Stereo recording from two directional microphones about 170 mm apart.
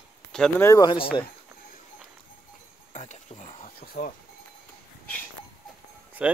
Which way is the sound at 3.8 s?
60° left (ahead or behind).